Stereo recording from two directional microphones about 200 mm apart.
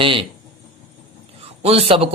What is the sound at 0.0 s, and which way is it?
Speech, 25° right (ahead or behind).